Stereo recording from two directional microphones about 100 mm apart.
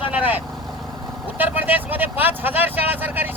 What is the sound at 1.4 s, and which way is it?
Speech, 20° right (ahead or behind).